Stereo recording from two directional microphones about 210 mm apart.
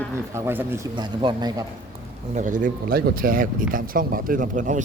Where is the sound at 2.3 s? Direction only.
35° right (ahead or behind).